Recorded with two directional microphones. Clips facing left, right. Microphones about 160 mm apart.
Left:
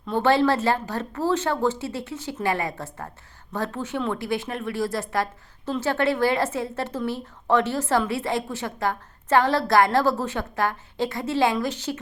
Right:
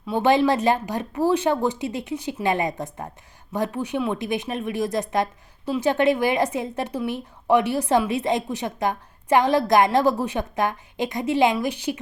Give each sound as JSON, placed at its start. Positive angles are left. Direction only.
{"t": 0.0, "sound": "a woman's voice", "side_deg": -15}